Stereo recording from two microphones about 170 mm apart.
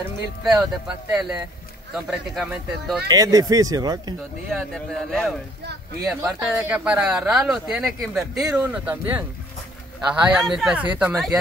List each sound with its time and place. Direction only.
0.8 s speech: 5° right (ahead or behind)
3.1 s speech: 20° right (ahead or behind)
4.5 s speech: centre (ahead or behind)